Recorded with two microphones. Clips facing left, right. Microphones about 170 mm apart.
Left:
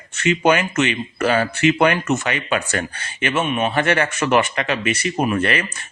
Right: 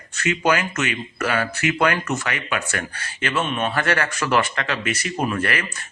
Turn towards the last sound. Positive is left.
turn(degrees=25)  # may be behind; listen again after turning